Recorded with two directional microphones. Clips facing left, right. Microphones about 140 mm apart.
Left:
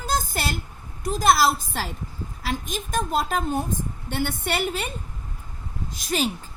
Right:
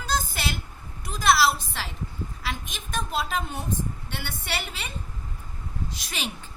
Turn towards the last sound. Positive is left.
turn(degrees=45)  # may be behind; listen again after turning